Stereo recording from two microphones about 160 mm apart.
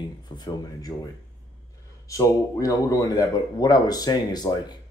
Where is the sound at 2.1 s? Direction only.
20° left (ahead or behind).